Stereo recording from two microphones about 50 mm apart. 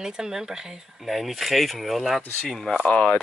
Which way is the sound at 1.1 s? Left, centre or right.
Centre.